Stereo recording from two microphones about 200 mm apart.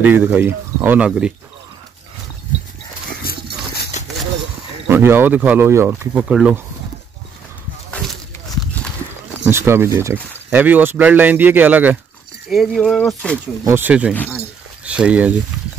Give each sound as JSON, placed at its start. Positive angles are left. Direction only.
{"t": 0.0, "sound": "speech", "side_deg": -10}
{"t": 3.3, "sound": "horse", "side_deg": 50}
{"t": 4.8, "sound": "speech", "side_deg": -10}
{"t": 9.5, "sound": "speech", "side_deg": -10}
{"t": 13.7, "sound": "speech", "side_deg": -10}